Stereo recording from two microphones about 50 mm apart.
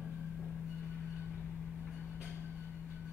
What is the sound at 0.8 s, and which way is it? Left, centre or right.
Train, centre.